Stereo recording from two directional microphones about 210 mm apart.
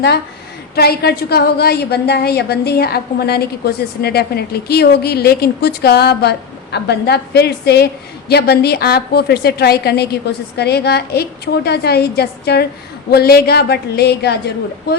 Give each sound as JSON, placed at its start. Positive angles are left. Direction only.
{"t": 0.8, "sound": "a woman's voice", "side_deg": 50}